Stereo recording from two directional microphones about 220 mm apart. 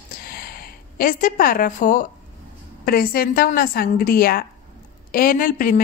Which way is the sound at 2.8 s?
40° left (ahead or behind).